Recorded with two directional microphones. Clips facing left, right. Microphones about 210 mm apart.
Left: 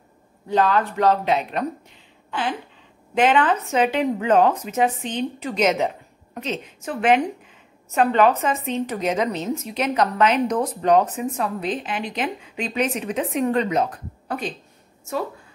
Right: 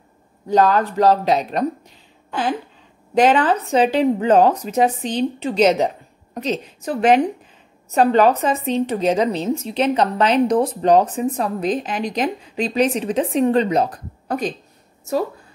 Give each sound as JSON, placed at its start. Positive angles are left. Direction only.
{"t": 0.5, "sound": "a woman's voice", "side_deg": -40}